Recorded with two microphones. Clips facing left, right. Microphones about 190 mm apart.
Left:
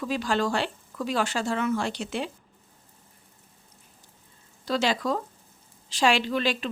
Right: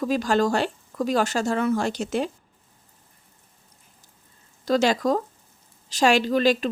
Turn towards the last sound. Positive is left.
turn(degrees=-40)  # may be behind; listen again after turning